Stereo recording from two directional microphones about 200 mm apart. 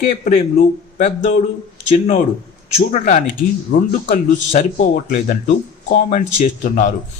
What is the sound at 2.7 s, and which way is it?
Speech, 35° left (ahead or behind).